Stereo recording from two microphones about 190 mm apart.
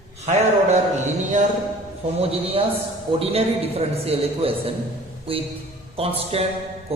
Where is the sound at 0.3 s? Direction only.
35° right (ahead or behind).